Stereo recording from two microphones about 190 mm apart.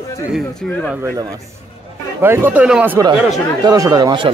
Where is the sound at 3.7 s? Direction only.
20° right (ahead or behind).